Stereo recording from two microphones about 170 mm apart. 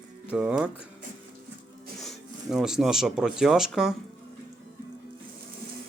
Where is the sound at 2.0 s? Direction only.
Centre (ahead or behind).